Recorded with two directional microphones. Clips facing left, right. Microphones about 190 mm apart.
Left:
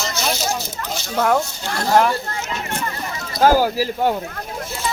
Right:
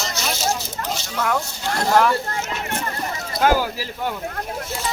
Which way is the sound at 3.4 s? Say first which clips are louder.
Left 4 dB; 35° left (ahead or behind).